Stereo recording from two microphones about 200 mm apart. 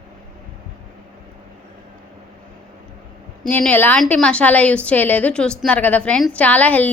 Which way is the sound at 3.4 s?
5° left (ahead or behind).